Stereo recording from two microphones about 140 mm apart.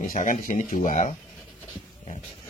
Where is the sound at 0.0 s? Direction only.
80° left.